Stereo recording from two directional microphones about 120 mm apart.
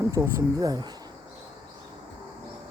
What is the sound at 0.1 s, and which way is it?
Speech, 25° right (ahead or behind).